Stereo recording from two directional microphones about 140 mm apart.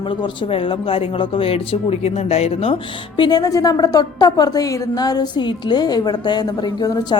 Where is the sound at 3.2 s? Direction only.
30° left (ahead or behind).